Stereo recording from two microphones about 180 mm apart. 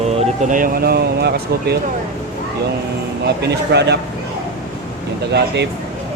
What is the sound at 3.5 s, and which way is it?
Speech, 70° right (ahead or behind).